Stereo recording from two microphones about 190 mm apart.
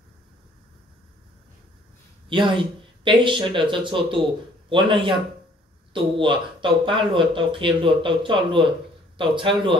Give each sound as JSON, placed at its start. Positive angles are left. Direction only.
{"t": 2.2, "sound": "speech", "side_deg": -25}
{"t": 5.9, "sound": "speech", "side_deg": -25}